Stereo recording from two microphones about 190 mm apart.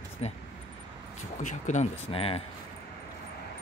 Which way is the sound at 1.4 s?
40° left (ahead or behind).